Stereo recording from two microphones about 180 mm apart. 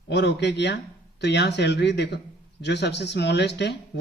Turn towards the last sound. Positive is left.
turn(degrees=70)  # may be behind; listen again after turning